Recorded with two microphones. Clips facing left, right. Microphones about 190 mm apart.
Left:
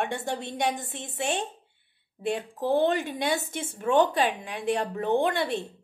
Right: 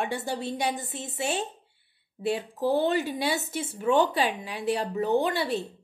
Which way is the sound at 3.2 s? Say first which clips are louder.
Even; 50° left (ahead or behind).